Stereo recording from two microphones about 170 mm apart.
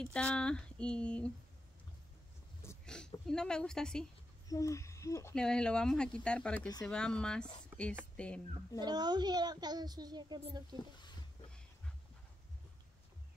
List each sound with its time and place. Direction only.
0.0 s speech: 5° left (ahead or behind)
2.8 s speech: 5° left (ahead or behind)
4.5 s owl: 20° left (ahead or behind)
5.3 s speech: 5° left (ahead or behind)
8.8 s a child's voice: 25° right (ahead or behind)